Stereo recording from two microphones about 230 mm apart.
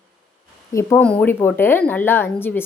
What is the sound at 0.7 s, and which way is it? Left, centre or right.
A woman's voice, centre.